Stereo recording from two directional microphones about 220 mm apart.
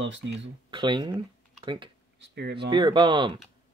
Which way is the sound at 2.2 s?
50° right (ahead or behind).